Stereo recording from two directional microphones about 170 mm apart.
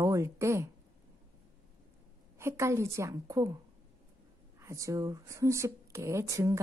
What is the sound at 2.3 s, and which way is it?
Speech, 15° right (ahead or behind).